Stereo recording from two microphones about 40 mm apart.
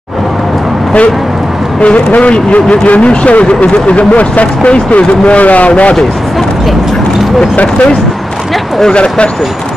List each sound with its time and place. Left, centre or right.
2.1 s speech: left
7.5 s speech: left
8.9 s speech: left